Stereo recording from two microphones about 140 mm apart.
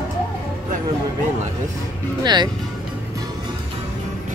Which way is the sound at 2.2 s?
30° right (ahead or behind).